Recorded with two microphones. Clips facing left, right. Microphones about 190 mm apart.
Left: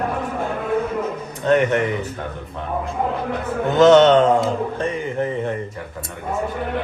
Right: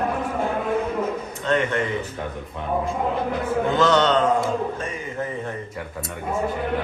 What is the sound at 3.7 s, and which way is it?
Speech, 20° left (ahead or behind).